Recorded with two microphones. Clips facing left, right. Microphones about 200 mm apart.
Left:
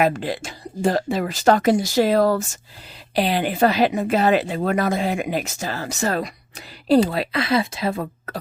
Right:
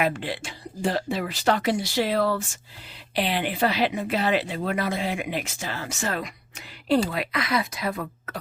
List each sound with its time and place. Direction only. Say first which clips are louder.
0.0 s speech: left 5 dB; 40° left (ahead or behind)